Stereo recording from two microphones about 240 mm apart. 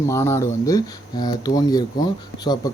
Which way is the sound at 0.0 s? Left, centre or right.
Centre.